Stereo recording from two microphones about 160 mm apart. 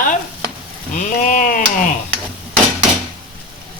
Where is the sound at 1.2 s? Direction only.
55° left (ahead or behind).